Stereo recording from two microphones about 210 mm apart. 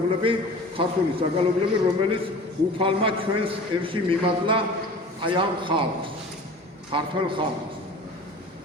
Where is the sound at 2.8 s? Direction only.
25° right (ahead or behind).